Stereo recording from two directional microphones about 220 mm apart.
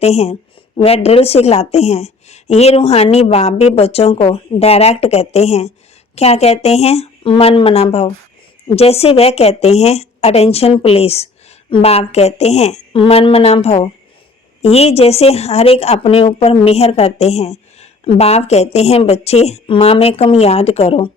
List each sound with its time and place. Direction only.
0.0 s speech: 30° left (ahead or behind)